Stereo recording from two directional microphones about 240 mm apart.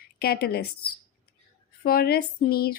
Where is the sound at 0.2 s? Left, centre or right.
Left.